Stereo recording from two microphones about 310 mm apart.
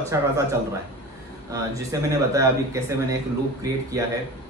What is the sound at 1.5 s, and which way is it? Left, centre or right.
Speech, centre.